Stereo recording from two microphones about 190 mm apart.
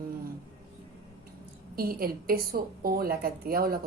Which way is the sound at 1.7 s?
50° right (ahead or behind).